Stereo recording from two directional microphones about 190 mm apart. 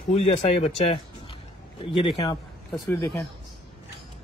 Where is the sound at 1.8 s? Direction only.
30° left (ahead or behind).